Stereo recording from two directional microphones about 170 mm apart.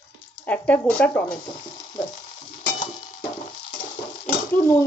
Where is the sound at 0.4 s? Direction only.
10° left (ahead or behind).